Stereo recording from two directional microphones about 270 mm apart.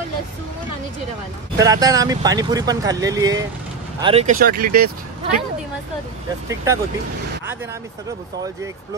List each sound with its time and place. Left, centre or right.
1.6 s speech: centre; by 5.4 s right